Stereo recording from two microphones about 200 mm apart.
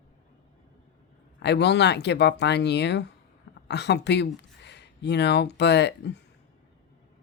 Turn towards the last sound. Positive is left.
turn(degrees=55)  # may be behind; listen again after turning